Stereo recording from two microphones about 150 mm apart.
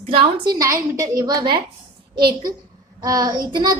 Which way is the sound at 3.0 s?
25° right (ahead or behind).